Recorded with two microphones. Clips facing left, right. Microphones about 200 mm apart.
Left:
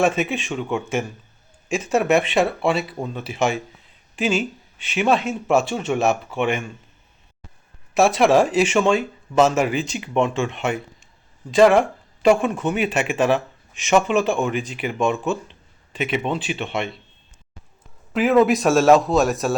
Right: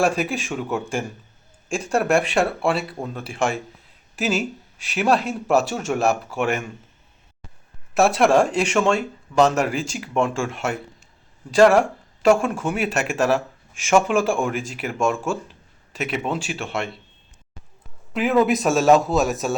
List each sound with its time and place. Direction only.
0.0 s speech: centre (ahead or behind)
7.9 s speech: centre (ahead or behind)
12.5 s speech: 5° right (ahead or behind)
15.2 s speech: 10° right (ahead or behind)
18.1 s speech: centre (ahead or behind)